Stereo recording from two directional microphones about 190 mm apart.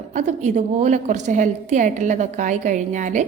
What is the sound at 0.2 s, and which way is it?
A woman's voice, 40° right (ahead or behind).